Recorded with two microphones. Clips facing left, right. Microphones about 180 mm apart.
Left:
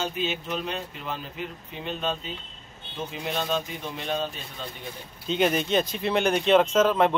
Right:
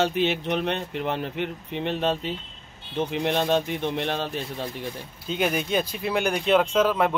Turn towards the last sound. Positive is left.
turn(degrees=-5)  # may be behind; listen again after turning